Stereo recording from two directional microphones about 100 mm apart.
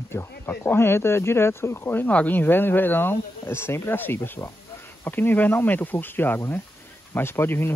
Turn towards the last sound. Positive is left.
turn(degrees=25)  # may be behind; listen again after turning